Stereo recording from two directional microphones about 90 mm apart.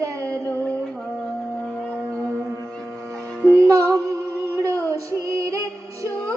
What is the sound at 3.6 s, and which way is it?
Music, 35° right (ahead or behind).